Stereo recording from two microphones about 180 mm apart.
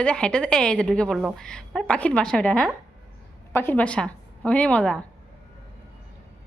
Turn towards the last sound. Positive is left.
turn(degrees=5)  # may be behind; listen again after turning